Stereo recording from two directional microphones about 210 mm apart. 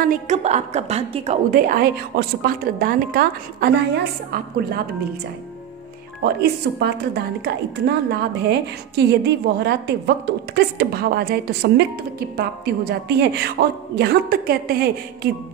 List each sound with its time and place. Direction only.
0.0 s a woman's voice: 35° right (ahead or behind)
1.5 s a woman's voice: 45° right (ahead or behind)
6.2 s a woman's voice: 50° right (ahead or behind)